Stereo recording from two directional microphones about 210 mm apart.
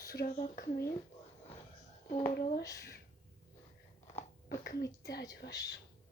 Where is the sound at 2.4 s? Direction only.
50° left (ahead or behind).